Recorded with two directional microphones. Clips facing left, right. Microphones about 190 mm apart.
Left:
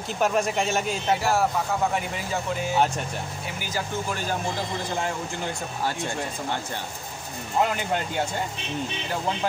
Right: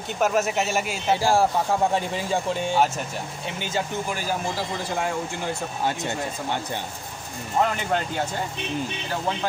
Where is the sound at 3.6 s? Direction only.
25° right (ahead or behind).